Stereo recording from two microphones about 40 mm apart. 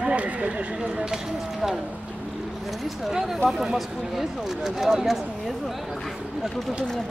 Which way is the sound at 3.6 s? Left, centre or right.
Centre.